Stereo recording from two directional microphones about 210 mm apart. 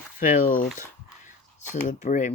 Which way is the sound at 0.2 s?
40° left (ahead or behind).